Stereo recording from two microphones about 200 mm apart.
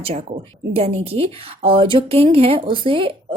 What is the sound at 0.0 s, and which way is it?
Speech, 30° right (ahead or behind).